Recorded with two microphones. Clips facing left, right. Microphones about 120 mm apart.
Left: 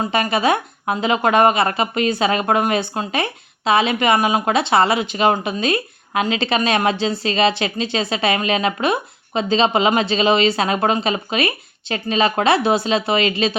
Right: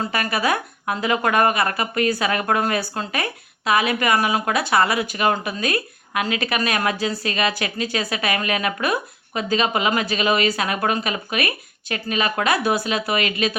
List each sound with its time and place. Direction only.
0.0 s speech: 25° left (ahead or behind)